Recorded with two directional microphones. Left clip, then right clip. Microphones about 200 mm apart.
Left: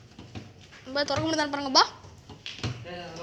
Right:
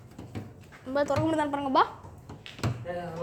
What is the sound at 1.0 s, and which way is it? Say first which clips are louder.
Speech: left 1 dB; centre (ahead or behind).